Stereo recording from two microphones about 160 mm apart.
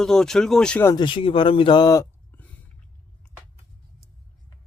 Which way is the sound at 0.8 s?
30° left (ahead or behind).